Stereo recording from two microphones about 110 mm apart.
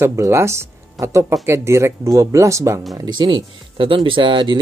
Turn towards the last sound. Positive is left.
turn(degrees=-45)  # may be behind; listen again after turning